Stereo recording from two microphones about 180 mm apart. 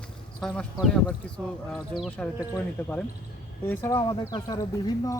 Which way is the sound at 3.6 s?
15° left (ahead or behind).